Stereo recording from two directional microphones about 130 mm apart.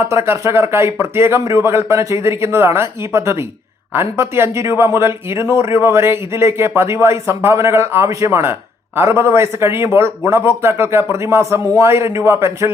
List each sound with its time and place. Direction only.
0.0 s speech: 20° right (ahead or behind)